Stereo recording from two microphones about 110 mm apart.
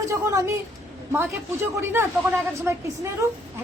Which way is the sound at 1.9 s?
20° right (ahead or behind).